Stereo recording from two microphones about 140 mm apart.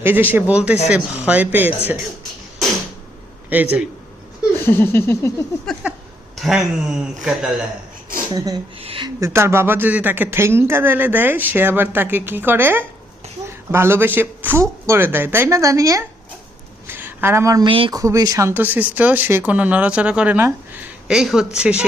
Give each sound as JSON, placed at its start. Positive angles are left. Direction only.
{"t": 0.0, "sound": "speech", "side_deg": -15}
{"t": 3.5, "sound": "speech", "side_deg": -10}
{"t": 4.5, "sound": "a sound", "side_deg": 15}
{"t": 5.8, "sound": "speech", "side_deg": -10}
{"t": 8.8, "sound": "speech", "side_deg": -45}
{"t": 9.2, "sound": "speech", "side_deg": -20}
{"t": 16.8, "sound": "a sound", "side_deg": -15}
{"t": 17.7, "sound": "speech", "side_deg": -40}
{"t": 17.9, "sound": "speech", "side_deg": -25}